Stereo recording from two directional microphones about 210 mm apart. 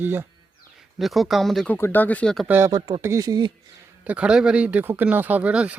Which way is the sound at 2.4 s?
10° right (ahead or behind).